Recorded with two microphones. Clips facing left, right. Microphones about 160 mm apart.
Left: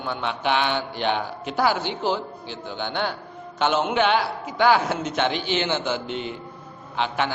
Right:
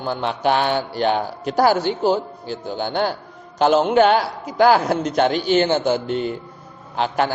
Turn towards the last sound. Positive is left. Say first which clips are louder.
# right 5 dB
turn(degrees=-40)  # may be behind; listen again after turning